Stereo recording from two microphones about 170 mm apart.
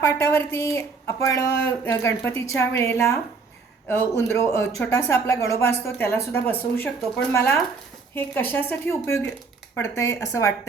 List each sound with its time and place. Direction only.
0.0 s speech: 15° left (ahead or behind)